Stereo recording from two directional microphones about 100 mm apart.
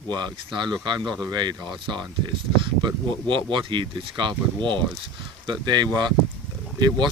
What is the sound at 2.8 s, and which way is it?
Speech, 50° right (ahead or behind).